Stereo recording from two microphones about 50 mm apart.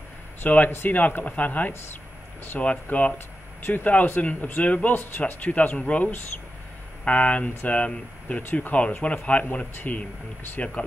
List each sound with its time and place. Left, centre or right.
0.4 s speech: left
0.7 s speech: left
0.9 s speech: left
3.6 s speech: left